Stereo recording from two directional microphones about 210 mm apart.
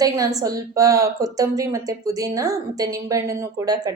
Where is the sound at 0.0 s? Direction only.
15° right (ahead or behind).